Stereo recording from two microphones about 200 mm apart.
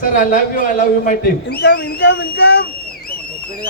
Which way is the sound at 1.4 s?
60° left (ahead or behind).